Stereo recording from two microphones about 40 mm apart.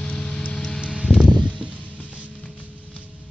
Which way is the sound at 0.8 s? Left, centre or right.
Right.